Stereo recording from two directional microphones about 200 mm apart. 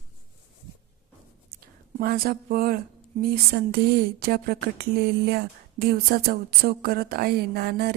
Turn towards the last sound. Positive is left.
turn(degrees=-50)  # may be behind; listen again after turning